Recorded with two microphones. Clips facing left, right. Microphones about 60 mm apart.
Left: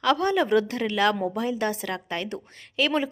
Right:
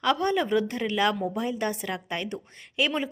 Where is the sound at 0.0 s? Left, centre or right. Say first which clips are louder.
Left 2 dB; centre.